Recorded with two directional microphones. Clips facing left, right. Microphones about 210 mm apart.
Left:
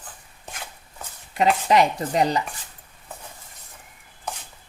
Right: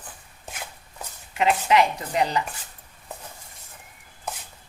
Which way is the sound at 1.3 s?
35° left (ahead or behind).